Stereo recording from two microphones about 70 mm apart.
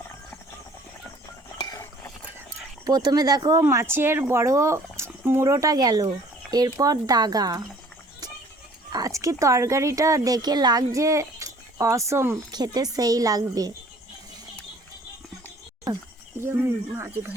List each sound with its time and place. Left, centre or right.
1.5 s a sound: left
2.8 s speech: right
3.6 s speech: right
8.9 s speech: right
10.9 s speech: right
12.5 s speech: right
16.4 s speech: right